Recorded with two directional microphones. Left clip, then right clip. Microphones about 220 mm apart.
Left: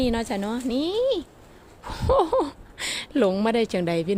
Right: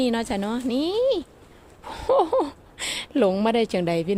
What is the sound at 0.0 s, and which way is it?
A woman's voice, 10° right (ahead or behind).